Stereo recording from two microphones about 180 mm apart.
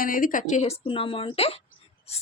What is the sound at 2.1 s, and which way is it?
Filing, 35° left (ahead or behind).